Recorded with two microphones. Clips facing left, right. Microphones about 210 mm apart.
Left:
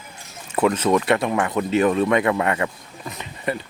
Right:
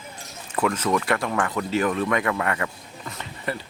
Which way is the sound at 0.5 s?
25° left (ahead or behind).